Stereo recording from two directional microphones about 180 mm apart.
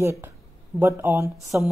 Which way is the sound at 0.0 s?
15° right (ahead or behind).